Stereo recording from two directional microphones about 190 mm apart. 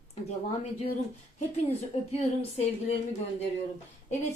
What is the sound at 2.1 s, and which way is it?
Speech, 35° left (ahead or behind).